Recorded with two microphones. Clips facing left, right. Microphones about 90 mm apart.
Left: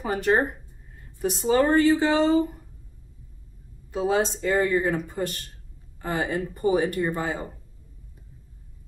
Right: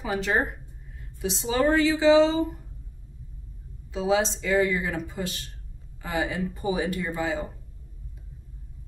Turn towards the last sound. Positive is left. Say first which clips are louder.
# left 2 dB
turn(degrees=50)  # may be behind; listen again after turning